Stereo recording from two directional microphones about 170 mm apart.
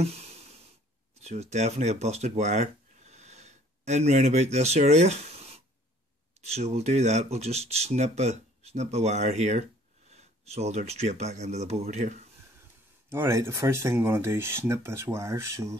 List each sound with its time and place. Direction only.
0.0 s a sound: 40° right (ahead or behind)
1.1 s speech: 40° right (ahead or behind)
13.1 s speech: 15° right (ahead or behind)